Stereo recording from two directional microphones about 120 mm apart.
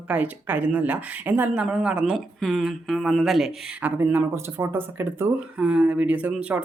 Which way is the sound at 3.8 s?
15° right (ahead or behind).